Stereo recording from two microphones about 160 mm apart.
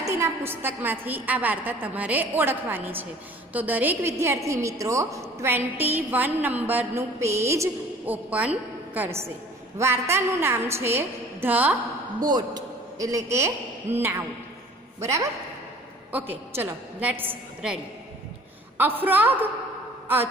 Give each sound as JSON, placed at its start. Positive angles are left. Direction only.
{"t": 0.0, "sound": "a sound", "side_deg": -15}
{"t": 0.8, "sound": "a woman's voice", "side_deg": -10}
{"t": 12.2, "sound": "a man's voice", "side_deg": -25}
{"t": 18.8, "sound": "a woman's voice", "side_deg": -10}